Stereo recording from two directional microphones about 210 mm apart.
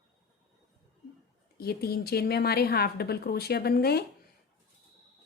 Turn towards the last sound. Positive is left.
turn(degrees=45)  # may be behind; listen again after turning